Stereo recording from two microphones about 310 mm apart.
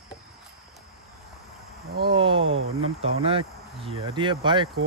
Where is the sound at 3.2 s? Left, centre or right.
Centre.